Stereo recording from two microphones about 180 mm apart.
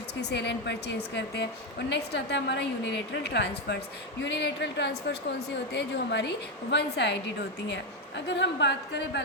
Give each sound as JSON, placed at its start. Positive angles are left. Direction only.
{"t": 0.2, "sound": "a woman's voice", "side_deg": 70}
{"t": 8.3, "sound": "a woman's voice", "side_deg": 75}